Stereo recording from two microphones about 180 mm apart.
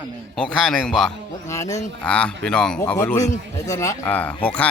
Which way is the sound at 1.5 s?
15° left (ahead or behind).